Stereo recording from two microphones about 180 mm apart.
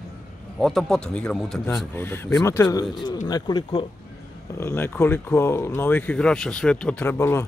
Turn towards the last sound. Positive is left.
turn(degrees=15)  # may be behind; listen again after turning